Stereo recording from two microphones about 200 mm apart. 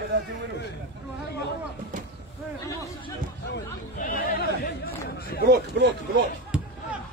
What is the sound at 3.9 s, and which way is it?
Chatter, 45° left (ahead or behind).